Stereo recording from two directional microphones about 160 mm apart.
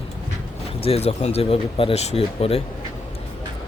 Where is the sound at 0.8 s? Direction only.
40° left (ahead or behind).